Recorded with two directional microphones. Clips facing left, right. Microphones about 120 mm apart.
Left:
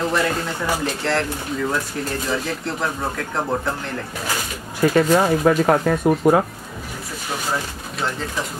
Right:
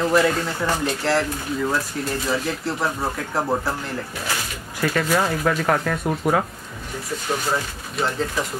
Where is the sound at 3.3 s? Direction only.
5° right (ahead or behind).